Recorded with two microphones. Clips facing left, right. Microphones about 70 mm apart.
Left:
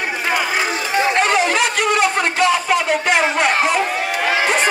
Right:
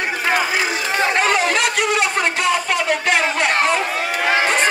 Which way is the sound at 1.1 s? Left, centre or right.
Centre.